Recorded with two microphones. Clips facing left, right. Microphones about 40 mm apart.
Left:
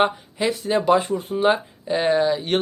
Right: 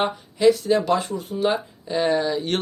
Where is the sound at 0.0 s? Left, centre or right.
Left.